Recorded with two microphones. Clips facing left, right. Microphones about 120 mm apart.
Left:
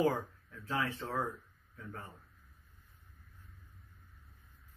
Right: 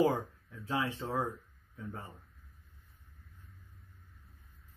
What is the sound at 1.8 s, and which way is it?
Speech, 20° right (ahead or behind).